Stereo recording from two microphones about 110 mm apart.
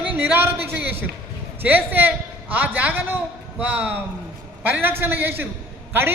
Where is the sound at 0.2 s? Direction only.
20° right (ahead or behind).